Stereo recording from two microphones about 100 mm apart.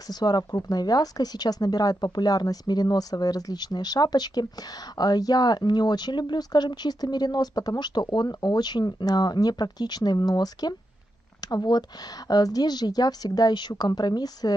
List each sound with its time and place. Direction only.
0.1 s speech: 45° left (ahead or behind)